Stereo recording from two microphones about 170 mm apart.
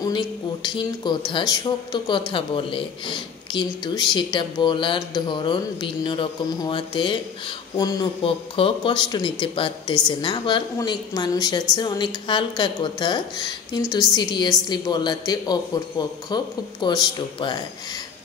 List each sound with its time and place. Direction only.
0.0 s speech: 25° left (ahead or behind)